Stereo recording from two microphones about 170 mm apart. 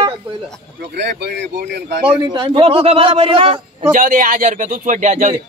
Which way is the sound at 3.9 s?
50° right (ahead or behind).